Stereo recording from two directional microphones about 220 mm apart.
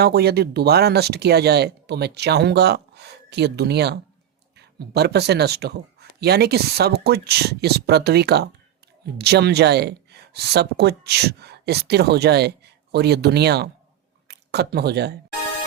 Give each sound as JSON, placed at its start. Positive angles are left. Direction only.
{"t": 0.0, "sound": "speech", "side_deg": -45}